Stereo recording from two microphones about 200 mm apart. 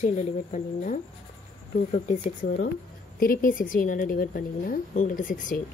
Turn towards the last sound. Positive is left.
turn(degrees=40)  # may be behind; listen again after turning